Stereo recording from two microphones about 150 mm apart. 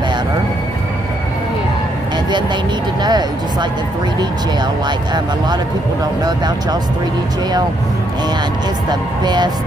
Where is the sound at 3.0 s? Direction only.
30° right (ahead or behind).